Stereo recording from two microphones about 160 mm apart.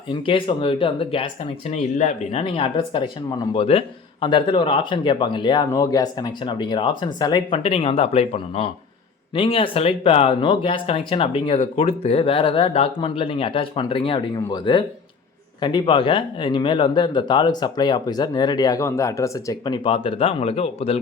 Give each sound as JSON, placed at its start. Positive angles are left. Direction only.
{"t": 0.1, "sound": "speech", "side_deg": 30}
{"t": 1.7, "sound": "speech", "side_deg": 45}
{"t": 2.4, "sound": "speech", "side_deg": 35}